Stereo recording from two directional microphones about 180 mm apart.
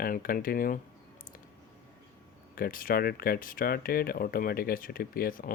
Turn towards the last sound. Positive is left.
turn(degrees=50)  # may be behind; listen again after turning